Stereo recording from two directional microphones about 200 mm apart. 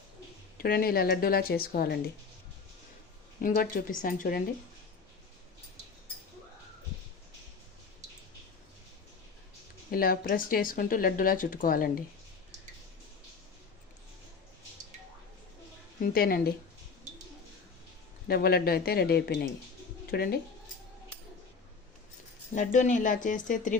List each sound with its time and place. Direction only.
0.6 s speech: 45° left (ahead or behind)
3.4 s speech: 45° left (ahead or behind)
9.9 s speech: 50° left (ahead or behind)
16.1 s speech: 50° left (ahead or behind)
18.3 s speech: 50° left (ahead or behind)
22.5 s speech: 40° left (ahead or behind)